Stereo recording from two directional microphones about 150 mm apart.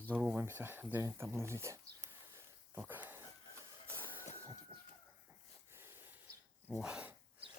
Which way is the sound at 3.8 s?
15° right (ahead or behind).